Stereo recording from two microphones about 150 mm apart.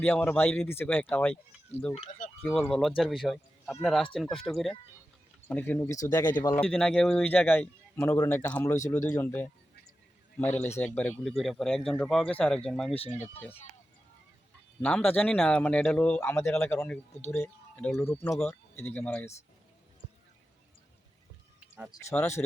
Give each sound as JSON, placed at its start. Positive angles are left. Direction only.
{"t": 0.0, "sound": "speech", "side_deg": 10}
{"t": 2.5, "sound": "speech", "side_deg": 5}
{"t": 5.5, "sound": "speech", "side_deg": 10}
{"t": 6.6, "sound": "speech", "side_deg": 5}
{"t": 11.2, "sound": "speech", "side_deg": 0}
{"t": 12.9, "sound": "speech", "side_deg": 45}
{"t": 14.8, "sound": "speech", "side_deg": 10}
{"t": 16.7, "sound": "speech", "side_deg": 5}
{"t": 21.9, "sound": "speech", "side_deg": 25}
{"t": 22.4, "sound": "speech", "side_deg": 15}